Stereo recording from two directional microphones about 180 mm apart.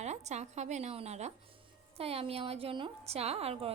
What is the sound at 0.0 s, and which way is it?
A woman's voice, 40° right (ahead or behind).